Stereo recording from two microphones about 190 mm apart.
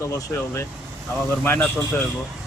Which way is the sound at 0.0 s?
15° left (ahead or behind).